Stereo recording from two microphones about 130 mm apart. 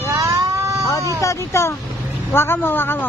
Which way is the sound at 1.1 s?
20° left (ahead or behind).